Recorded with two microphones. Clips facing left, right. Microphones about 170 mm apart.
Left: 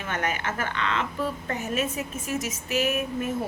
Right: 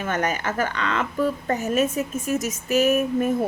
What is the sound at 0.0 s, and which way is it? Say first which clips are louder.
A woman's voice: right 5 dB; 45° right (ahead or behind).